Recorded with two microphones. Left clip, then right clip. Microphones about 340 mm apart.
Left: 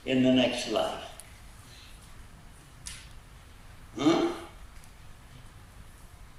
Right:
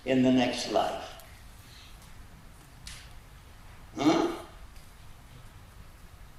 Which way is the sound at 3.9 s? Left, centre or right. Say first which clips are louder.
Even; centre.